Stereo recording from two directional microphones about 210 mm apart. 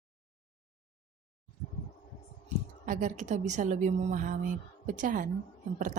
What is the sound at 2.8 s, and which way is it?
A woman's voice, 35° right (ahead or behind).